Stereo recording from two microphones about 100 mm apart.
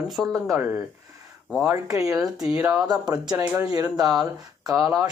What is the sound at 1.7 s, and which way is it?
Speech, 35° right (ahead or behind).